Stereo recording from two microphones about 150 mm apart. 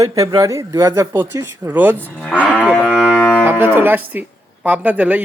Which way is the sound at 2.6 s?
Centre (ahead or behind).